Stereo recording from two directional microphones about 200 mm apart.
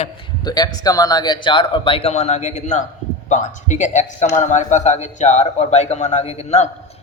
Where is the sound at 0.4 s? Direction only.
20° left (ahead or behind).